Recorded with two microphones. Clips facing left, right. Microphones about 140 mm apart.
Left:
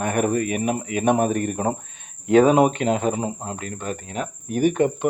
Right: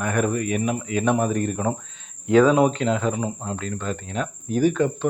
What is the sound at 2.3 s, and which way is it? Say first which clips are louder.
Speech: left 1 dB; 25° left (ahead or behind).